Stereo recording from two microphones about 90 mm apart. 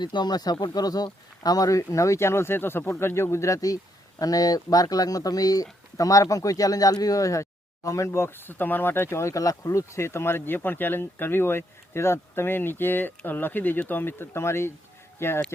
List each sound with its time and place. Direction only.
0.0 s speech: 55° left (ahead or behind); by 15.3 s 25° left (ahead or behind)